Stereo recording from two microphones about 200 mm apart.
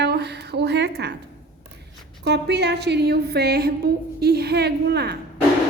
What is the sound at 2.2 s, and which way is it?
A woman's voice, 55° right (ahead or behind).